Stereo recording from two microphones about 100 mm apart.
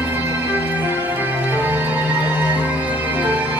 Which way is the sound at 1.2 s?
20° right (ahead or behind).